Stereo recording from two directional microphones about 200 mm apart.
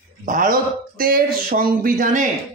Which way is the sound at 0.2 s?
40° right (ahead or behind).